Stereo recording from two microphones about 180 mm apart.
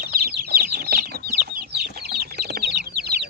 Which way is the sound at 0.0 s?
60° right (ahead or behind).